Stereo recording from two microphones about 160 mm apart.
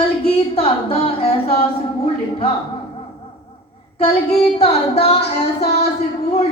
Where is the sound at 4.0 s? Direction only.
35° left (ahead or behind).